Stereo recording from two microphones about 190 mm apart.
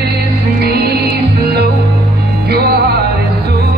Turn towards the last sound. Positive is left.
turn(degrees=-55)  # may be behind; listen again after turning